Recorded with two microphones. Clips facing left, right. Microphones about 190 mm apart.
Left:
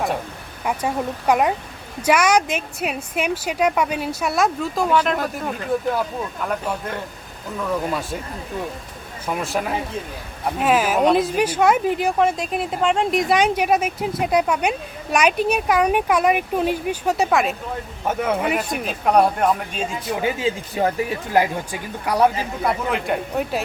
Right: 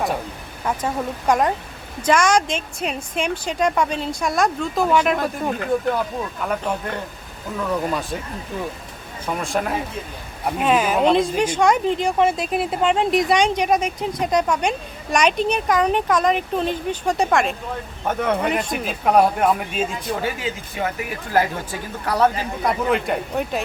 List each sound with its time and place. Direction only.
0.6 s speech: 10° left (ahead or behind); by 5.1 s 5° right (ahead or behind)
6.4 s speech: centre (ahead or behind)
9.2 s speech: 5° left (ahead or behind)
20.1 s speech: 20° left (ahead or behind)
20.7 s speech: 35° left (ahead or behind)
21.3 s speech: 15° left (ahead or behind)
22.6 s speech: centre (ahead or behind)